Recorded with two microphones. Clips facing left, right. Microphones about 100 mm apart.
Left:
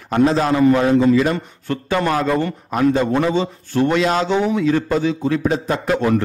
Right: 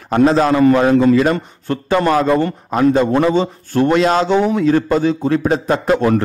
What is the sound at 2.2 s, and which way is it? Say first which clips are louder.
Speech: right 4 dB; 25° right (ahead or behind).